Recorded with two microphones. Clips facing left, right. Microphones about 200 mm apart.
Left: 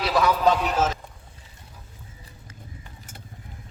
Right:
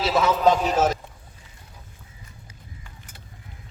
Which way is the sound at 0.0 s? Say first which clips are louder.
Right 1 dB; 25° right (ahead or behind).